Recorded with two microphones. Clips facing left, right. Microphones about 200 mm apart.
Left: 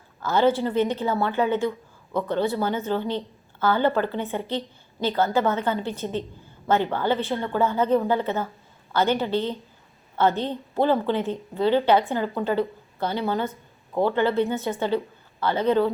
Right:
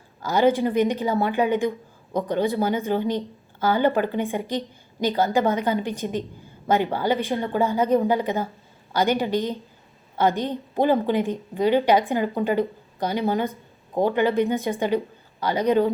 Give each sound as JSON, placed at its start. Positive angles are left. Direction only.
{"t": 0.2, "sound": "a woman's voice", "side_deg": -15}